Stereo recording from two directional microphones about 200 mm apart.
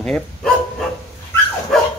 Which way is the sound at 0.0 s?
5° left (ahead or behind).